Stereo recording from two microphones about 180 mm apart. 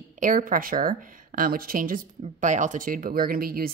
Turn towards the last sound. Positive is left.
turn(degrees=-55)  # may be behind; listen again after turning